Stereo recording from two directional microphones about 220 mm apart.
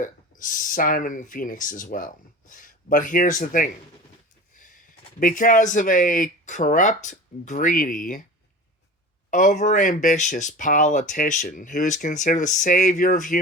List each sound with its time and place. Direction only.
0.0 s speech: 35° left (ahead or behind)
4.5 s a sound: 35° left (ahead or behind)
5.2 s speech: 35° left (ahead or behind)
9.3 s speech: 35° left (ahead or behind)